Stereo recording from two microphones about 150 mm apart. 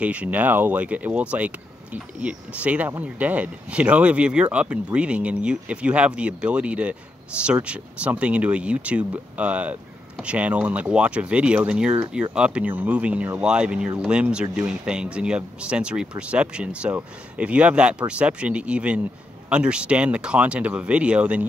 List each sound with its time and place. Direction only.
0.0 s speech: 10° right (ahead or behind)